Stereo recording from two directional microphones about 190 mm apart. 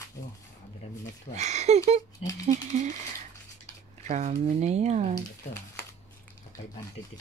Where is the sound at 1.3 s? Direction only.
35° right (ahead or behind).